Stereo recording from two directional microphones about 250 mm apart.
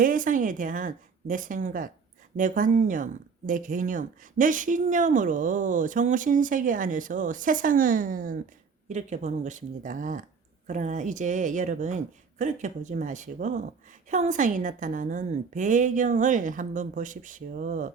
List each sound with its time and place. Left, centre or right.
0.0 s a woman's voice: right